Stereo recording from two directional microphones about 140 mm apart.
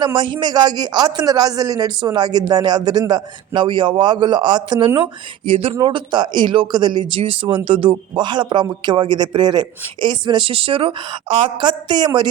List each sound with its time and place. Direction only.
0.0 s speech: 35° right (ahead or behind)
5.5 s speech: 45° right (ahead or behind)
5.7 s speech: 35° right (ahead or behind)